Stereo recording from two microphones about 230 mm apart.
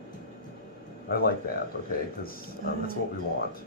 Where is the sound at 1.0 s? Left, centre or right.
Left.